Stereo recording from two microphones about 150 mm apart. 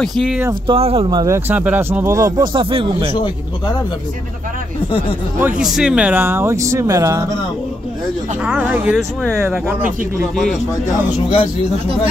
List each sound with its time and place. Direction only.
0.0 s speech: centre (ahead or behind)
0.7 s speech: 40° right (ahead or behind)
1.2 s speech: 15° right (ahead or behind)
2.5 s speech: 35° right (ahead or behind)
5.6 s speech: 5° right (ahead or behind); by 7.2 s 20° right (ahead or behind)
8.5 s speech: 10° right (ahead or behind)
10.3 s speech: centre (ahead or behind)